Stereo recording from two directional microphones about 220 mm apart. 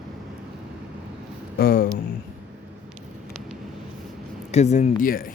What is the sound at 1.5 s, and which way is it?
Speech, 40° left (ahead or behind).